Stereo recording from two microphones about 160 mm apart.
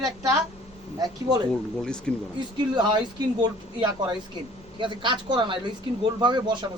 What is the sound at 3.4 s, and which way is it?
A woman's voice, 25° right (ahead or behind).